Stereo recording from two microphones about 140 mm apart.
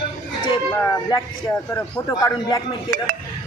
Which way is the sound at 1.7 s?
25° left (ahead or behind).